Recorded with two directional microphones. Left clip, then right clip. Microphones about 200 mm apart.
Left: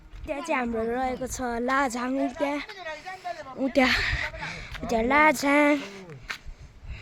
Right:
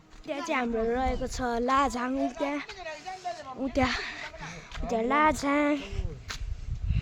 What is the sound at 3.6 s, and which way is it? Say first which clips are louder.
Speech: left 6 dB; 20° left (ahead or behind).